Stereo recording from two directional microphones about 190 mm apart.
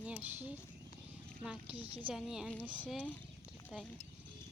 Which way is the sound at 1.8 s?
30° right (ahead or behind).